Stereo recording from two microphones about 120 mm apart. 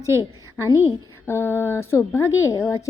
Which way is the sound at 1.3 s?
20° left (ahead or behind).